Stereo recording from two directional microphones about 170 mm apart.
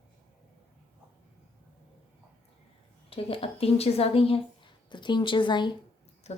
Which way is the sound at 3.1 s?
35° left (ahead or behind).